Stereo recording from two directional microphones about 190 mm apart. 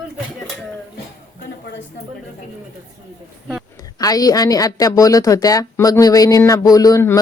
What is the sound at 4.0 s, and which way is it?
A woman's voice, 20° left (ahead or behind).